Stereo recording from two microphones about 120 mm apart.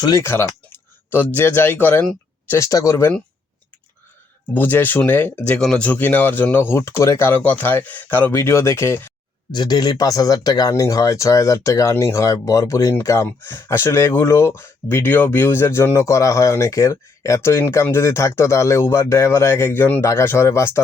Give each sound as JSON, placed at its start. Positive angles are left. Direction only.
{"t": 0.0, "sound": "speech", "side_deg": 30}
{"t": 0.3, "sound": "speech", "side_deg": 20}
{"t": 2.5, "sound": "speech", "side_deg": 25}
{"t": 4.5, "sound": "speech", "side_deg": 15}
{"t": 9.5, "sound": "speech", "side_deg": 35}